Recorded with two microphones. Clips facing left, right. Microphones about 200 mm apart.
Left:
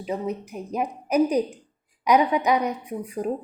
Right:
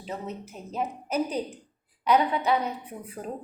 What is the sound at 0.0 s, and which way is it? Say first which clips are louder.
A woman's voice: left 7 dB; 15° left (ahead or behind).